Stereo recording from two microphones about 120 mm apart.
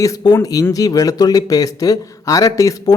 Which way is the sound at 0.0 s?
30° left (ahead or behind).